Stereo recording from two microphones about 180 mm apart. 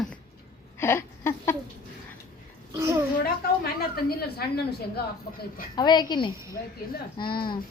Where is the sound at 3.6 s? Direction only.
60° left (ahead or behind).